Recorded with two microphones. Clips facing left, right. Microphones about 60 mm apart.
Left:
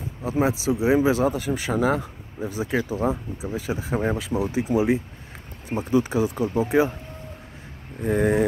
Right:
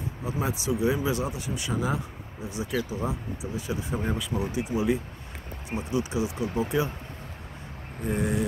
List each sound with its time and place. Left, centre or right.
0.3 s speech: left
2.6 s speech: left
8.0 s speech: left